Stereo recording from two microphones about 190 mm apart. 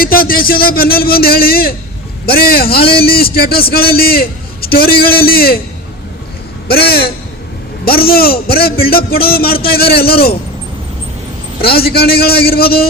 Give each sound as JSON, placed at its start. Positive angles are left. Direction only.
{"t": 0.0, "sound": "a man's voice", "side_deg": 50}
{"t": 6.7, "sound": "a man's voice", "side_deg": 55}
{"t": 11.6, "sound": "a man's voice", "side_deg": 55}